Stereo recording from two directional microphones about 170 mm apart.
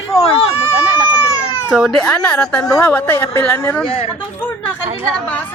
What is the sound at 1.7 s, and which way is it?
Speech, centre (ahead or behind).